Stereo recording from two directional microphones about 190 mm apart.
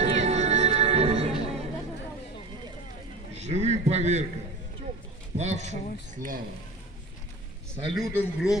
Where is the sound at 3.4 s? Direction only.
35° right (ahead or behind).